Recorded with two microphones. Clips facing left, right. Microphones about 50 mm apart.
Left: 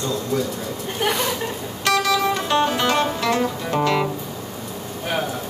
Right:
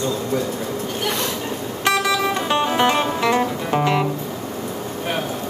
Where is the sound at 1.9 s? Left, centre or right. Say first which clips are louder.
Even; centre.